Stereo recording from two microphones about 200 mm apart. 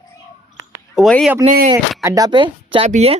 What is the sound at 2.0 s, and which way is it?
Speech, 15° right (ahead or behind).